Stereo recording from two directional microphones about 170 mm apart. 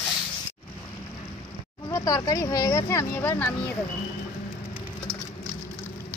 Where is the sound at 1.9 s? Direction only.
20° left (ahead or behind).